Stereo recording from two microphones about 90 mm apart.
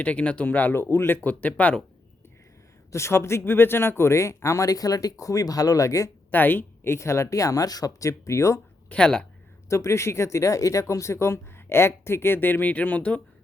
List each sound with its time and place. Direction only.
0.0 s speech: 15° left (ahead or behind)
2.9 s speech: 30° left (ahead or behind)
6.3 s speech: 20° left (ahead or behind)
8.9 s speech: 10° left (ahead or behind)
9.6 s speech: 30° left (ahead or behind); by 13.2 s 15° left (ahead or behind)